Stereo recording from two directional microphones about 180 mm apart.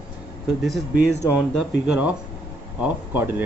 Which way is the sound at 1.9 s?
10° right (ahead or behind).